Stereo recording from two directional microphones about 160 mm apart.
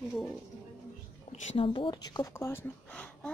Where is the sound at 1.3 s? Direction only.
35° left (ahead or behind); by 2.6 s 15° left (ahead or behind).